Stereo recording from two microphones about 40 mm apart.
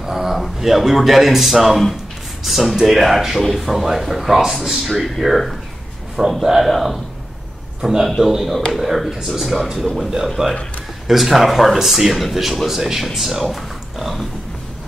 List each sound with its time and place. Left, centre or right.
0.0 s speech: centre
6.2 s speech: centre